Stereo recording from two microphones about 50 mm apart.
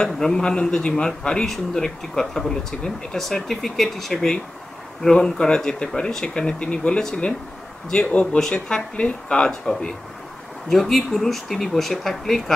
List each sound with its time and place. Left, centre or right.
0.0 s speech: centre
8.1 s speech: left
8.4 s speech: centre